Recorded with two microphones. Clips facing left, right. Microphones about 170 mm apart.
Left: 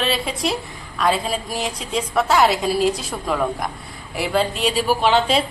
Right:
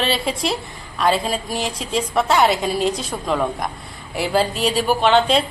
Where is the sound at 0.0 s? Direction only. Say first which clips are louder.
Right 1 dB; centre (ahead or behind).